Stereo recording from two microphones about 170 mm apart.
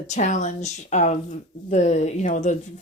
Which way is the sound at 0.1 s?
45° left (ahead or behind).